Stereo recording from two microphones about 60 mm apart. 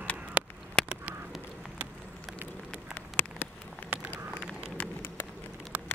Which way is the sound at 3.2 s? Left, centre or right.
Left.